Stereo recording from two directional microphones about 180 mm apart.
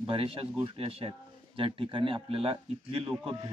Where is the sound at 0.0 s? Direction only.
30° right (ahead or behind).